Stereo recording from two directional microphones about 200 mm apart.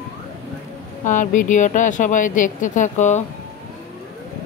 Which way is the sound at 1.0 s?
40° left (ahead or behind).